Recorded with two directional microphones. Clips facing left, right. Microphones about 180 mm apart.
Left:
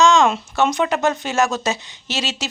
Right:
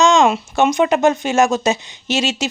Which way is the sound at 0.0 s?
15° right (ahead or behind).